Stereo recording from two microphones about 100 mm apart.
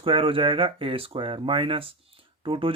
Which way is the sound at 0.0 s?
65° right (ahead or behind).